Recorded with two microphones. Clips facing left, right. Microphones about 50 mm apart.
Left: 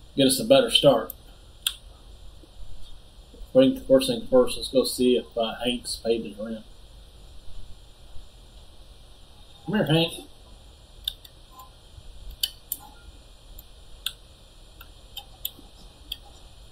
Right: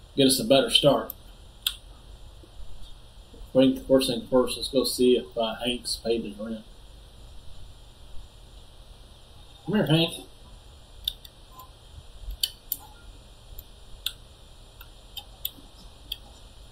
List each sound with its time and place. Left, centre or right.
0.2 s speech: centre
3.5 s speech: centre
6.2 s speech: left
9.7 s speech: centre
11.1 s tick-tock: centre
12.4 s scissors: centre